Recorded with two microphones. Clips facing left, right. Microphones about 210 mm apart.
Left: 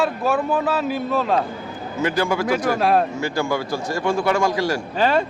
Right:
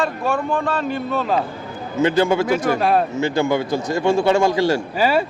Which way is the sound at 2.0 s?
25° right (ahead or behind).